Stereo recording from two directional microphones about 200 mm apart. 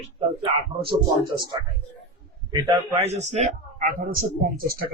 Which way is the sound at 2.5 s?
15° right (ahead or behind).